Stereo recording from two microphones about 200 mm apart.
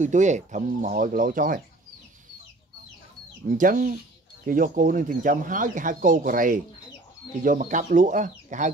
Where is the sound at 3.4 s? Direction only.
45° right (ahead or behind).